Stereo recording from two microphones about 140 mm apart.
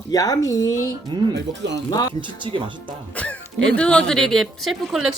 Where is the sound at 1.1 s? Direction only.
35° right (ahead or behind).